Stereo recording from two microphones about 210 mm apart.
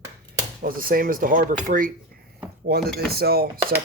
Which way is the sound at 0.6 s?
45° right (ahead or behind).